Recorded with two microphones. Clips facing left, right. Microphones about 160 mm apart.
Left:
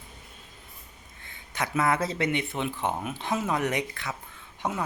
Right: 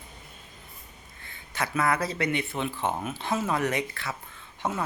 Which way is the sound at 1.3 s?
20° left (ahead or behind).